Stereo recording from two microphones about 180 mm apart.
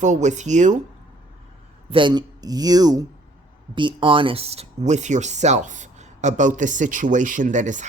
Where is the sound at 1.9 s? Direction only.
25° right (ahead or behind).